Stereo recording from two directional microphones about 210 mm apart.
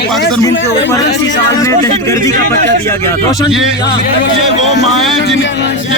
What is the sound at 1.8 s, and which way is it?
Speech, 15° left (ahead or behind).